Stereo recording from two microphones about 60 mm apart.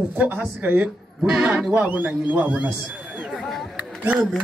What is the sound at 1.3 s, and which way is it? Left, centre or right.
Speech, centre.